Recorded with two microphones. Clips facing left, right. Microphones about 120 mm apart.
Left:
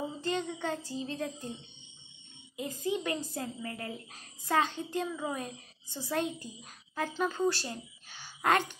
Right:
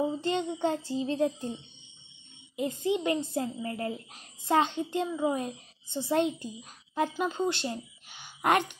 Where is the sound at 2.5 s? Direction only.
25° right (ahead or behind).